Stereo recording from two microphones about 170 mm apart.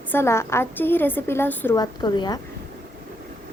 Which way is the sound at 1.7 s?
25° left (ahead or behind).